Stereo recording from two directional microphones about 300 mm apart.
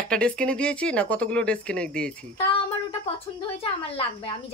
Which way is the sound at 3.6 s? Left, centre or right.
Centre.